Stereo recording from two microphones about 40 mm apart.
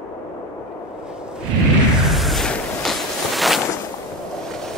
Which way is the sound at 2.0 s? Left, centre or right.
Centre.